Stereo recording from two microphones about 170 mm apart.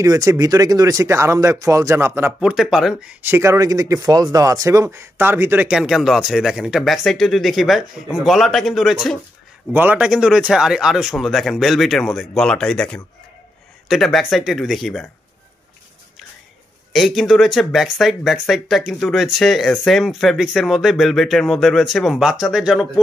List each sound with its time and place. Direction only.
0.0 s speech: 20° right (ahead or behind)
2.5 s speech: centre (ahead or behind)
16.9 s speech: centre (ahead or behind)